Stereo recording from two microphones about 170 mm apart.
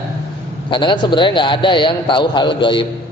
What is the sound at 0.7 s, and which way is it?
A man's voice, 30° left (ahead or behind).